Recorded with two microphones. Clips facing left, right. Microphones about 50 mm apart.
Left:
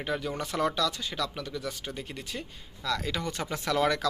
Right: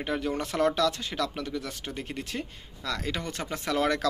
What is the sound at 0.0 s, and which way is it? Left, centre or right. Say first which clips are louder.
Speech: right 2 dB; right.